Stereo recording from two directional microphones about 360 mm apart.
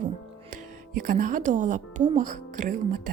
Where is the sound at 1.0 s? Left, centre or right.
Right.